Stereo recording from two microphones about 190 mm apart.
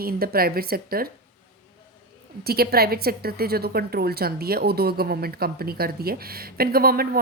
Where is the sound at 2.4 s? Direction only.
55° right (ahead or behind).